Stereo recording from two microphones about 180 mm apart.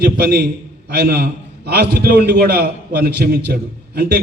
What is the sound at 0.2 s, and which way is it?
A man's voice, 60° right (ahead or behind).